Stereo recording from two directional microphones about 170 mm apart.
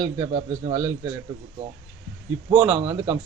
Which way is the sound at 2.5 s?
10° right (ahead or behind).